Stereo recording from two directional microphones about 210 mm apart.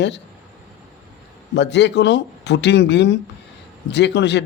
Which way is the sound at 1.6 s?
55° left (ahead or behind).